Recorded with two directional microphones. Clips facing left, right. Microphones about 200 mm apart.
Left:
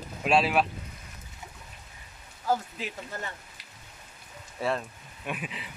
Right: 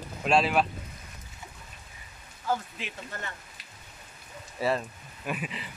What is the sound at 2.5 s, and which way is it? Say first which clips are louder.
Speech: left 2 dB; 35° left (ahead or behind).